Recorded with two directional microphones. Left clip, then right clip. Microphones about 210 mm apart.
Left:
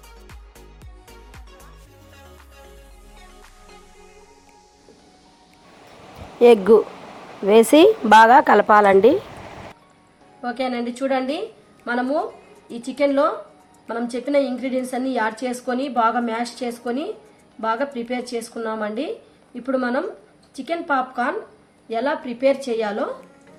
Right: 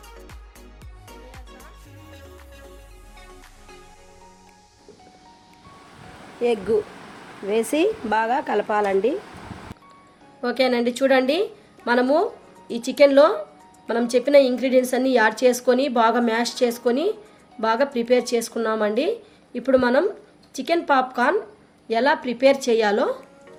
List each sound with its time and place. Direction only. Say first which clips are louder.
6.4 s speech: left 9 dB; 25° left (ahead or behind)
10.4 s a woman's voice: right 4 dB; 40° right (ahead or behind)